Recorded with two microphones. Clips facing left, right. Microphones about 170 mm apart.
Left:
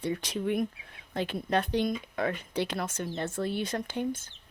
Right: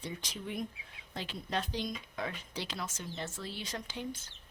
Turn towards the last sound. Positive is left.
turn(degrees=55)  # may be behind; listen again after turning